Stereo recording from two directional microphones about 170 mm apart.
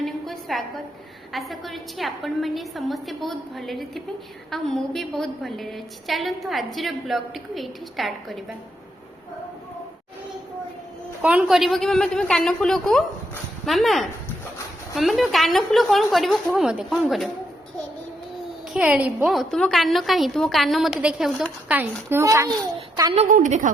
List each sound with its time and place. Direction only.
0.0 s a sound: centre (ahead or behind)
1.3 s a woman's voice: centre (ahead or behind)
11.2 s a woman's voice: 10° right (ahead or behind)
18.7 s a woman's voice: 5° right (ahead or behind)
23.3 s a woman's voice: 50° right (ahead or behind)